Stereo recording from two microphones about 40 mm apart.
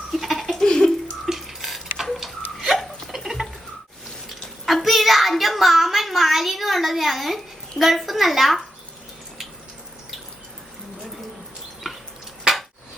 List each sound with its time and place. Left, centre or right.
0.1 s laughter: centre
0.6 s a sound: centre
1.3 s a sound: centre
2.0 s tick-tock: centre
3.1 s water: centre
4.6 s child singing: centre